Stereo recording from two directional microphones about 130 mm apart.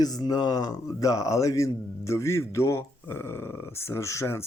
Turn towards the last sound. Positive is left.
turn(degrees=20)  # may be behind; listen again after turning